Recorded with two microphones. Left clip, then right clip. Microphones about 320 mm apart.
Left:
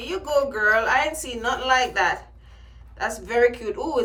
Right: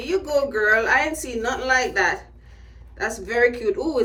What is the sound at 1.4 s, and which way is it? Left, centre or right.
Speech, left.